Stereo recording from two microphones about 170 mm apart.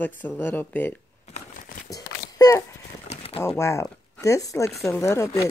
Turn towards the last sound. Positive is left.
turn(degrees=15)  # may be behind; listen again after turning